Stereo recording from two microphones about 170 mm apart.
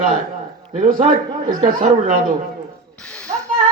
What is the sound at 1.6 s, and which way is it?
Speech, 55° right (ahead or behind).